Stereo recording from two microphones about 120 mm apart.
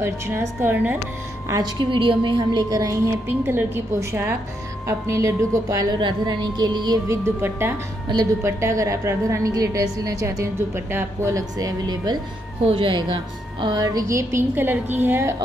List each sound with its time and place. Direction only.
0.0 s a woman's voice: 20° right (ahead or behind)
1.5 s a woman's voice: 40° right (ahead or behind)
3.3 s a woman's voice: 20° right (ahead or behind); by 7.0 s 35° right (ahead or behind)
7.1 s a woman's voice: 20° right (ahead or behind)
12.6 s a woman's voice: 45° right (ahead or behind); by 15.3 s 20° right (ahead or behind)